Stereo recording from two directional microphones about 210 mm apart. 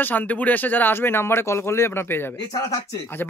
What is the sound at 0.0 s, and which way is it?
A man's voice, 10° left (ahead or behind).